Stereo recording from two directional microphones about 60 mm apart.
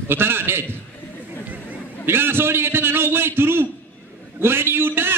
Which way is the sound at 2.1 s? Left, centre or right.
Right.